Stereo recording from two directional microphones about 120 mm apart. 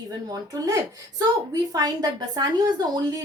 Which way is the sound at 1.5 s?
30° right (ahead or behind).